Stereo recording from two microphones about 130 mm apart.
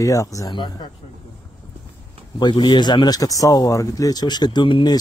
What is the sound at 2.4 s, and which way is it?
Speech, 35° left (ahead or behind).